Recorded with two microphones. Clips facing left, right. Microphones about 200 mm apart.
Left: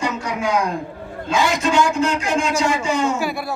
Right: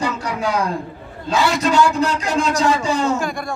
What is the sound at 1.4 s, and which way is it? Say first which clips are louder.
Speech: right 2 dB; 15° left (ahead or behind).